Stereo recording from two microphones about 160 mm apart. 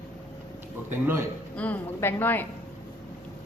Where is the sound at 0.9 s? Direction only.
15° right (ahead or behind).